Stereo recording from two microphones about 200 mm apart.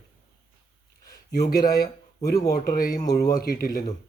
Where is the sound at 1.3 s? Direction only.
50° left (ahead or behind).